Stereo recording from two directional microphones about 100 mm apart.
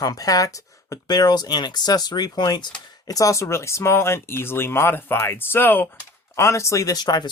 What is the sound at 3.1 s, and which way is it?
Speech, 35° left (ahead or behind).